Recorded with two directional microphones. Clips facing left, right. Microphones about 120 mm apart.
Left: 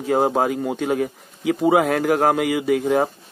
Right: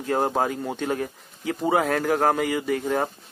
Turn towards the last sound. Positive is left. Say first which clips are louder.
# left 6 dB
turn(degrees=5)  # may be behind; listen again after turning